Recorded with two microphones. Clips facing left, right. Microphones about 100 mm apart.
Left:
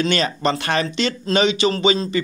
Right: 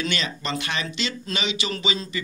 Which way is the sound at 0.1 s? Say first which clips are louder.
Left 8 dB; 45° left (ahead or behind).